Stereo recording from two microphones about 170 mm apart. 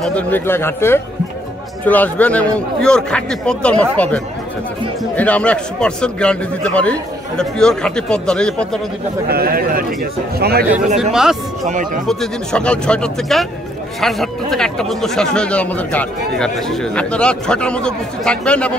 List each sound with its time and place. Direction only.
0.0 s a man's voice: 10° left (ahead or behind)
9.3 s a man's voice: 60° right (ahead or behind)
11.0 s speech: 5° right (ahead or behind)
11.6 s speech: 50° right (ahead or behind)
12.1 s speech: 5° left (ahead or behind)